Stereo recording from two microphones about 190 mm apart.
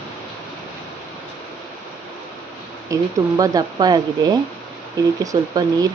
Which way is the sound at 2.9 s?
20° right (ahead or behind).